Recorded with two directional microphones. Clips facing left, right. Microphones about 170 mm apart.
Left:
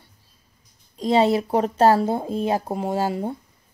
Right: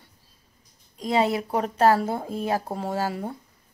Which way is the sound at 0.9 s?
25° left (ahead or behind).